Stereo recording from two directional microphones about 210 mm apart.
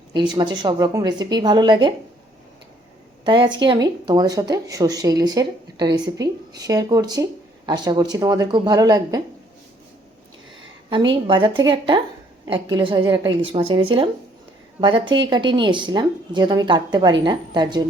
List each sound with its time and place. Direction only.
0.1 s a woman's voice: 20° right (ahead or behind)
3.2 s a woman's voice: 20° right (ahead or behind)
10.8 s a woman's voice: 25° right (ahead or behind)